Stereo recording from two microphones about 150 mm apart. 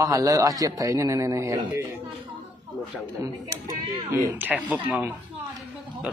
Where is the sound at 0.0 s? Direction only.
20° right (ahead or behind).